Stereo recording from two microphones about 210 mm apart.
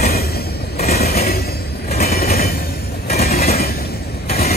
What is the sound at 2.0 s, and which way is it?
Train, 45° left (ahead or behind).